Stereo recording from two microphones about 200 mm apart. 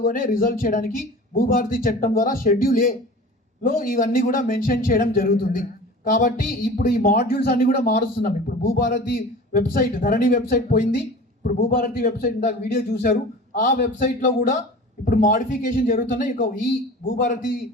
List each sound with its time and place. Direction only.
0.0 s speech: 45° left (ahead or behind)